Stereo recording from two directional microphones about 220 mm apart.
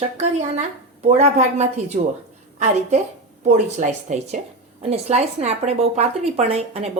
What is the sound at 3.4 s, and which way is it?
Speech, 30° right (ahead or behind).